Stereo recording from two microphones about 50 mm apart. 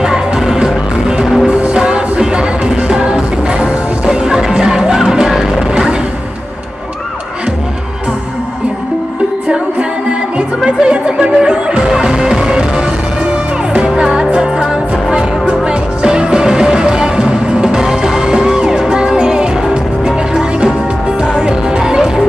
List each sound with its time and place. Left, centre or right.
0.0 s music: centre
1.5 s music: centre
10.6 s music: centre